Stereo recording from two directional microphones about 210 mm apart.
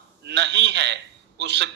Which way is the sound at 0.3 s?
55° right (ahead or behind).